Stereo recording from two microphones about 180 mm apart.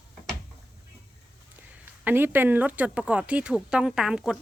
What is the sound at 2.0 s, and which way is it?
Speech, 10° right (ahead or behind).